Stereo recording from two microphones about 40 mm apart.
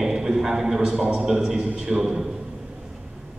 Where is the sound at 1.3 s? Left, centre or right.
Centre.